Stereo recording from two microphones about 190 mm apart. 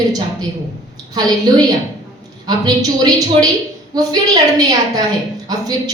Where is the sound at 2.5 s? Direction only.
20° right (ahead or behind).